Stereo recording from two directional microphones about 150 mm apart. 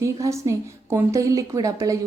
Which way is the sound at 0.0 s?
20° right (ahead or behind).